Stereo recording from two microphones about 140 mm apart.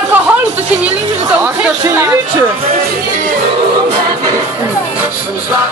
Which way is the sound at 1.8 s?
20° right (ahead or behind).